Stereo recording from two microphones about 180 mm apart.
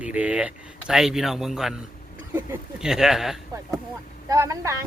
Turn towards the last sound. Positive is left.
turn(degrees=-20)  # may be behind; listen again after turning